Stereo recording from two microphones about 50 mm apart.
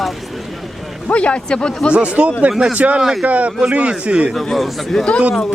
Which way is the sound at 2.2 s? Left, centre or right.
Right.